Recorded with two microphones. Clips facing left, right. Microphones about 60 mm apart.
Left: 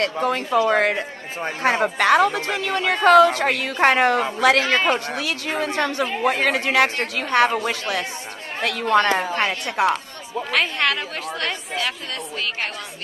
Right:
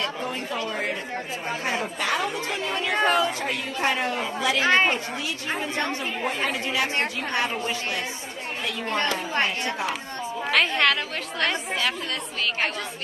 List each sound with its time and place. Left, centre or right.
0.0 s speech: left
1.6 s a woman's voice: left
8.8 s a woman's voice: left
9.8 s speech: left
10.5 s speech: centre